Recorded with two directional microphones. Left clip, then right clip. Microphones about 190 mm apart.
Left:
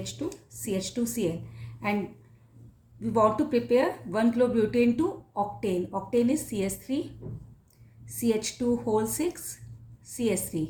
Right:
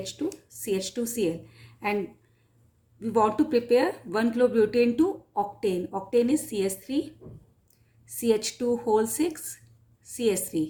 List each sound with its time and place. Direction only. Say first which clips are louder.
0.6 s a woman's voice: right 2 dB; 35° right (ahead or behind)
3.0 s a woman's voice: even; 35° right (ahead or behind)
8.2 s a woman's voice: right 3 dB; 35° right (ahead or behind)